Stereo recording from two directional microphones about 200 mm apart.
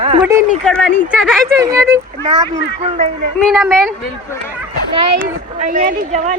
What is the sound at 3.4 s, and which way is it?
Speech, centre (ahead or behind).